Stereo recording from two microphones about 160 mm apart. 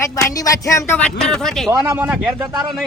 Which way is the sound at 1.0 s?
5° left (ahead or behind).